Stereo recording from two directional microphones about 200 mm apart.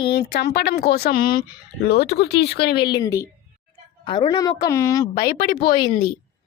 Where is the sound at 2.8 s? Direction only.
20° left (ahead or behind).